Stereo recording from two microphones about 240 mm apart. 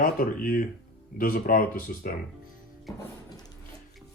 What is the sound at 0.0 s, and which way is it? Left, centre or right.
Speech, left.